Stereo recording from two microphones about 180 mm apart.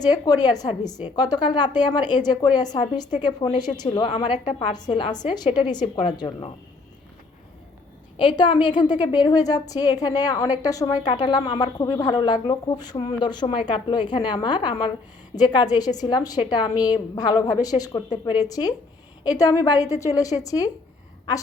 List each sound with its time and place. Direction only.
0.0 s a woman's voice: 20° left (ahead or behind)
8.1 s a woman's voice: 25° left (ahead or behind)